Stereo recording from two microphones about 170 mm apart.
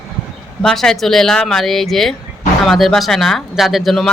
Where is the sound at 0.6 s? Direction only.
5° left (ahead or behind).